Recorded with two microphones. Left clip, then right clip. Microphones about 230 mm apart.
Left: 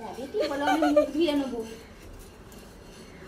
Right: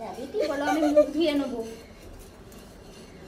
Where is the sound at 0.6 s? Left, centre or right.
Left.